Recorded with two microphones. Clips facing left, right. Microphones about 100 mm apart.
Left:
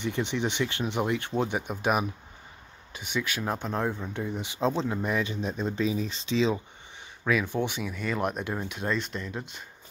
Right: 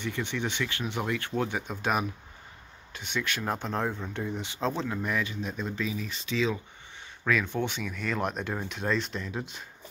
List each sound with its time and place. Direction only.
0.0 s speech: 20° left (ahead or behind)
7.2 s speech: 10° left (ahead or behind)